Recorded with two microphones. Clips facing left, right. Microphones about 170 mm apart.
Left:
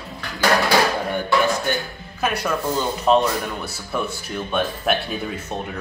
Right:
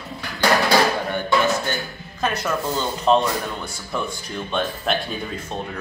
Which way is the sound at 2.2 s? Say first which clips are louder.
Left 1 dB; 10° left (ahead or behind).